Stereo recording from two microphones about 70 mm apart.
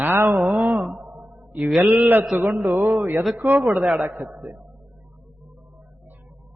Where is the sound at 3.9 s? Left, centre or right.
Right.